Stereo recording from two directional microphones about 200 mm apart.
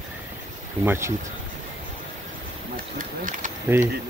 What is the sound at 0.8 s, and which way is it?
Speech, 10° right (ahead or behind).